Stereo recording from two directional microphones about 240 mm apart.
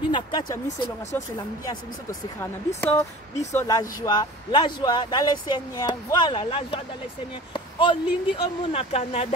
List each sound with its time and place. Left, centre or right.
0.1 s speech: centre
2.8 s speech: centre; by 9.3 s left